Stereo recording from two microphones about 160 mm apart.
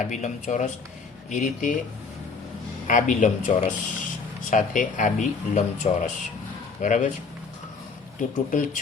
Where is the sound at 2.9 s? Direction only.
55° left (ahead or behind).